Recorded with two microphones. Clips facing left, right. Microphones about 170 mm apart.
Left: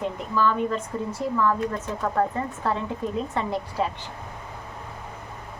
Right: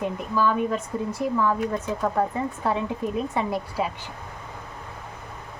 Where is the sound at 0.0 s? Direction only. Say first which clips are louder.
Even; 10° right (ahead or behind).